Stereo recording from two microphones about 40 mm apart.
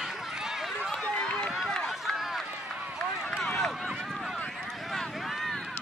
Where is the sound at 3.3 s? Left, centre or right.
Centre.